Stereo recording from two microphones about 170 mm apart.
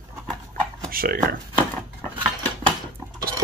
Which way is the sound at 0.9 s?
60° right (ahead or behind).